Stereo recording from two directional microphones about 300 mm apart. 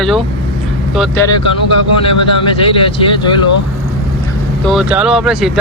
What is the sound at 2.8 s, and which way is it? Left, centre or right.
Speech, centre.